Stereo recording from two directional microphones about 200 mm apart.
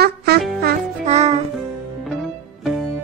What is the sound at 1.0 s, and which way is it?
Music, 35° right (ahead or behind).